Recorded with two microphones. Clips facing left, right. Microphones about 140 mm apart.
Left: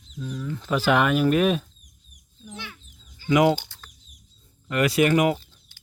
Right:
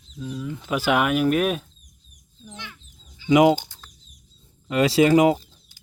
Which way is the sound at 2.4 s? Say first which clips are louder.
Left 1 dB; 10° left (ahead or behind).